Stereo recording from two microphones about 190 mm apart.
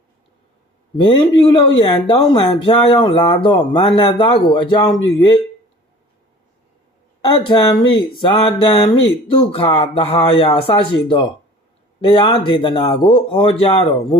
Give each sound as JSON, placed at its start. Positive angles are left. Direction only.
{"t": 1.0, "sound": "speech", "side_deg": 25}
{"t": 7.2, "sound": "speech", "side_deg": 25}